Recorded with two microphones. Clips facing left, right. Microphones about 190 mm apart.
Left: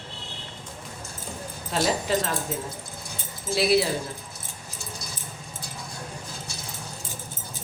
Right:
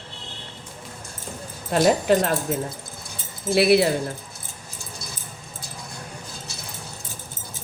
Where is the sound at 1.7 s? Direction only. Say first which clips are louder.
Right 7 dB; 60° right (ahead or behind).